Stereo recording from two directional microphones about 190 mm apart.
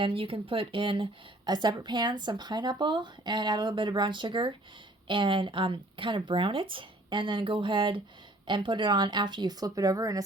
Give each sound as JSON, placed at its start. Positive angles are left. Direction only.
{"t": 0.0, "sound": "speech", "side_deg": -30}